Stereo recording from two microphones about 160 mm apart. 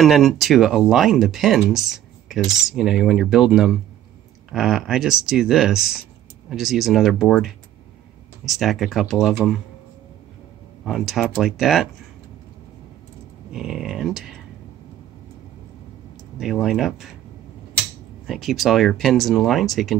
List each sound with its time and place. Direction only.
0.0 s speech: centre (ahead or behind)
10.9 s speech: centre (ahead or behind)
13.5 s speech: centre (ahead or behind)
16.3 s speech: centre (ahead or behind)
18.2 s speech: centre (ahead or behind)